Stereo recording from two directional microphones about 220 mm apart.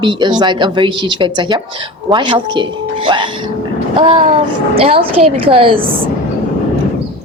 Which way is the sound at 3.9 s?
25° right (ahead or behind).